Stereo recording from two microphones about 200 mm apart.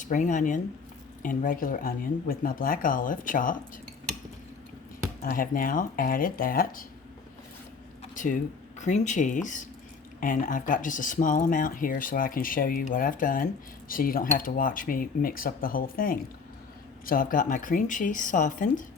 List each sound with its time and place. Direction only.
0.0 s speech: 40° left (ahead or behind)
5.2 s speech: 45° left (ahead or behind)
8.1 s speech: 40° left (ahead or behind)